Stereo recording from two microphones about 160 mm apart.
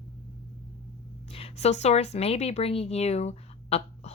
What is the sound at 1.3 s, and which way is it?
Speech, 40° left (ahead or behind).